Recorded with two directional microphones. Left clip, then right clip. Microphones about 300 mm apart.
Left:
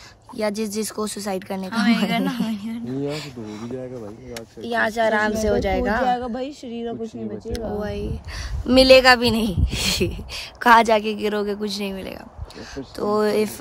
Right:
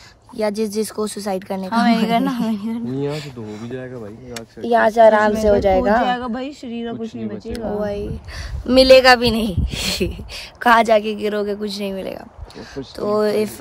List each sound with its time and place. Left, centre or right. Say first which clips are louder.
0.4 s a man's voice: right 4 dB; centre
1.7 s a woman's voice: right 5 dB; centre
3.1 s a man's voice: right 2 dB; centre
4.6 s a woman's voice: right 9 dB; centre
6.0 s speech: right 1 dB; right
7.5 s a woman's voice: right 5 dB; centre